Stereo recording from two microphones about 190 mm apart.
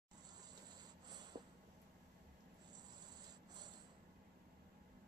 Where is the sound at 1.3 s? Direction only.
25° right (ahead or behind).